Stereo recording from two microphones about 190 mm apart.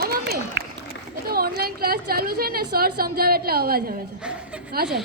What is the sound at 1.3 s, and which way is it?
A woman's voice, 50° right (ahead or behind).